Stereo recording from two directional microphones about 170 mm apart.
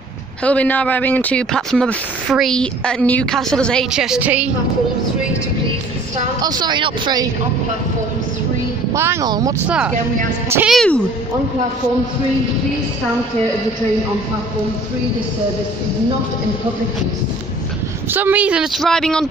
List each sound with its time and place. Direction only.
0.4 s speech: 5° left (ahead or behind); by 4.5 s 10° right (ahead or behind)
6.4 s speech: 25° right (ahead or behind)
8.9 s speech: 15° right (ahead or behind)
9.7 s speech: 5° right (ahead or behind)
18.1 s speech: 10° right (ahead or behind)